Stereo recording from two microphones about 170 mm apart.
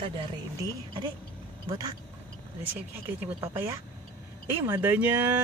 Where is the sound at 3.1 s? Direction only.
15° right (ahead or behind).